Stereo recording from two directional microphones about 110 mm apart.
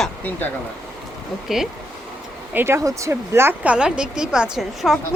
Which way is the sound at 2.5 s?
25° right (ahead or behind).